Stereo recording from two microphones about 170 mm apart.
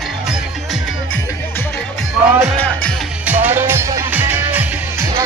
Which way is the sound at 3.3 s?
10° right (ahead or behind).